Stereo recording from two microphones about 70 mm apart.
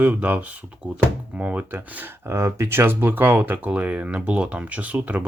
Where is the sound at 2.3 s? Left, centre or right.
Right.